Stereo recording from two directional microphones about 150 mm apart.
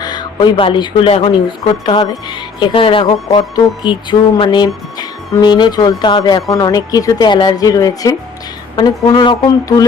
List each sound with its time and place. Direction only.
0.0 s a woman's voice: 30° left (ahead or behind)